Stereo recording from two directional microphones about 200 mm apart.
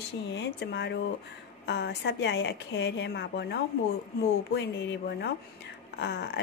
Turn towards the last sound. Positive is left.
turn(degrees=55)  # may be behind; listen again after turning